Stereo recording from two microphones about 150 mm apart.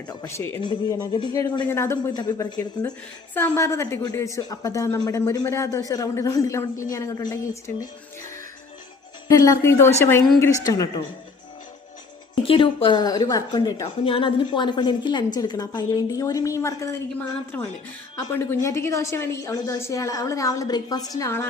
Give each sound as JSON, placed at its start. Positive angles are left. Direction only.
{"t": 0.1, "sound": "a woman's voice", "side_deg": 20}
{"t": 0.6, "sound": "a woman's voice", "side_deg": 30}
{"t": 9.2, "sound": "a woman's voice", "side_deg": 20}
{"t": 12.3, "sound": "a woman's voice", "side_deg": 35}